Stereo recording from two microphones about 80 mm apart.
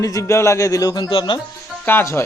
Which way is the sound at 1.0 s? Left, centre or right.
Left.